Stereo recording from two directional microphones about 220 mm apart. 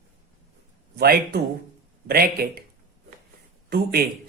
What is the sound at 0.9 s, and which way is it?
Speech, 45° right (ahead or behind).